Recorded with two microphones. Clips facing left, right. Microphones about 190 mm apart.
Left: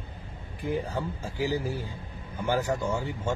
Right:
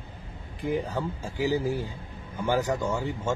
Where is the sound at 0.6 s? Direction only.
15° right (ahead or behind).